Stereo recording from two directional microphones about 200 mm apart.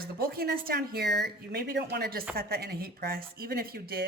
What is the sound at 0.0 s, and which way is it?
Speech, 50° right (ahead or behind).